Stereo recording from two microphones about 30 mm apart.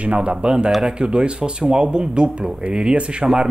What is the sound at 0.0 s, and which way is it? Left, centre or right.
Speech, right.